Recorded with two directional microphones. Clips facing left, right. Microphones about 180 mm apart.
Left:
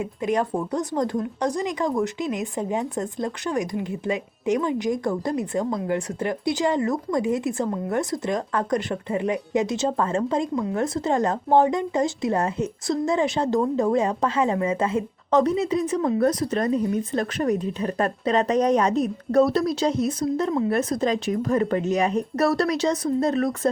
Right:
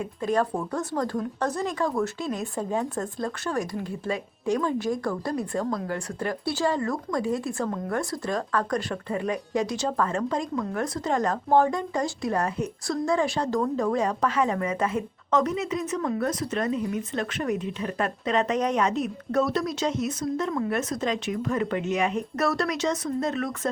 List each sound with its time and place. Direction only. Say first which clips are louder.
0.0 s a woman's voice: left 1 dB; 20° left (ahead or behind); by 23.6 s 35° left (ahead or behind)